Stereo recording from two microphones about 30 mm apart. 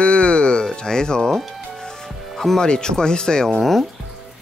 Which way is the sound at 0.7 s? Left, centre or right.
Left.